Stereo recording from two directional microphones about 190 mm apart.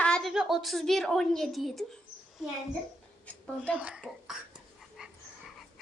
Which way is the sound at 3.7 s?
5° right (ahead or behind).